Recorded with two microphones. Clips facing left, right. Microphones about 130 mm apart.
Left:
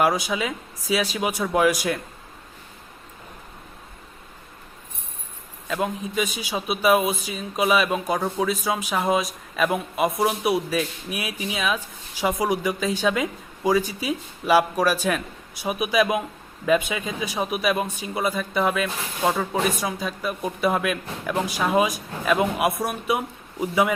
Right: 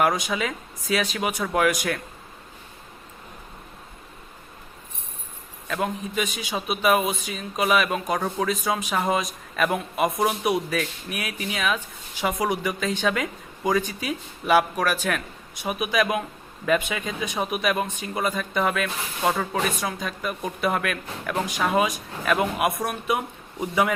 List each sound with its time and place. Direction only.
0.0 s speech: 5° left (ahead or behind)
5.6 s a man's voice: 10° left (ahead or behind)